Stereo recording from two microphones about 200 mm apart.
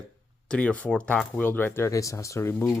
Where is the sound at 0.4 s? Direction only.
5° left (ahead or behind).